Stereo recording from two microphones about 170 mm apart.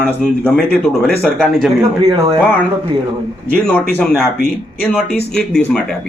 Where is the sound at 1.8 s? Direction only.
20° right (ahead or behind).